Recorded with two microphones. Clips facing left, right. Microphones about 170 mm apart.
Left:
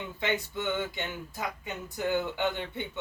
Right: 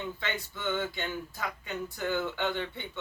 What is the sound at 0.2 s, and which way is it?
Speech, 15° left (ahead or behind).